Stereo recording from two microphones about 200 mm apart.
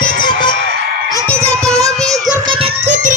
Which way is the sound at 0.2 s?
40° left (ahead or behind).